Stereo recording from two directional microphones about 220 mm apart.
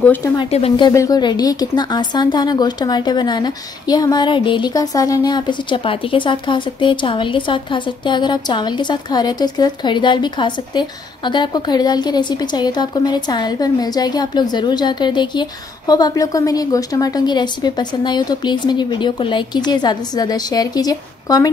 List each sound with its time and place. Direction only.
0.0 s speech: 10° left (ahead or behind)
0.4 s speech: 25° left (ahead or behind)